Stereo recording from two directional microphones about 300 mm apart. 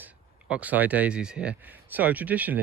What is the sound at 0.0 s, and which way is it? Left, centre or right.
Speech, centre.